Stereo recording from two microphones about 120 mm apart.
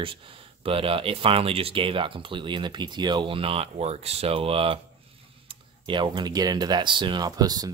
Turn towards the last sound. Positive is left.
turn(degrees=-35)  # may be behind; listen again after turning